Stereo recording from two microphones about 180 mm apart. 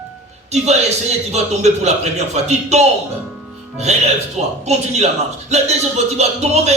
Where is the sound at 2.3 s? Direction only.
40° right (ahead or behind).